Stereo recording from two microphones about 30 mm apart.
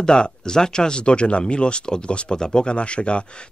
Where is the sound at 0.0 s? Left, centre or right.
Left.